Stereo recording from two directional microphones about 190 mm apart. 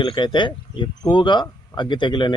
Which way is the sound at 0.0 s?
25° left (ahead or behind).